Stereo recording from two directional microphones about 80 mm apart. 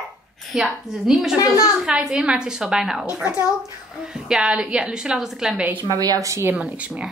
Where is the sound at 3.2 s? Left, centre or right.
Centre.